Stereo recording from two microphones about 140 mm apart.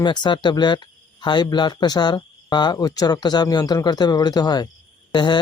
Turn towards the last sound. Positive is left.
turn(degrees=30)  # may be behind; listen again after turning